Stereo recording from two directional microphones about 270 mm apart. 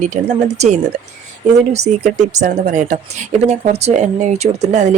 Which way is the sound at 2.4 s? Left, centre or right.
Right.